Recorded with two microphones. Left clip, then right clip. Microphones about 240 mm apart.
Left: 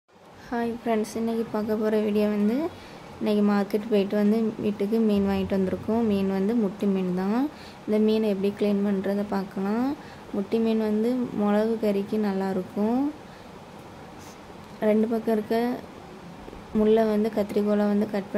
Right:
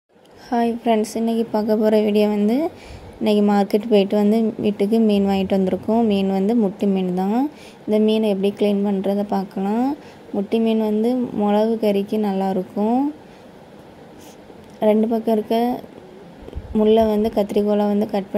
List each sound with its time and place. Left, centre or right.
0.5 s a woman's voice: centre
12.7 s speech: centre
14.8 s speech: centre
16.8 s speech: centre